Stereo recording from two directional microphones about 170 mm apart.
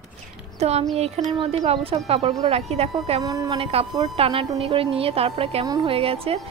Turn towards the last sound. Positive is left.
turn(degrees=-35)  # may be behind; listen again after turning